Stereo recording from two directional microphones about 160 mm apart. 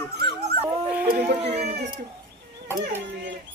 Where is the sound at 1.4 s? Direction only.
40° right (ahead or behind).